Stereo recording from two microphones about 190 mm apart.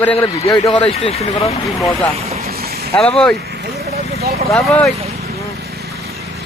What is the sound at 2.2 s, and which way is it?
Vehicle, 35° right (ahead or behind).